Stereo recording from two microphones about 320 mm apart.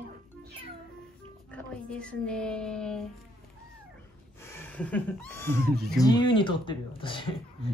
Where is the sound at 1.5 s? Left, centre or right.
Centre.